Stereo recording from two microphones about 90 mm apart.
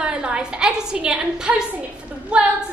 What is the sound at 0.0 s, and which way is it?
A woman's voice, 10° right (ahead or behind).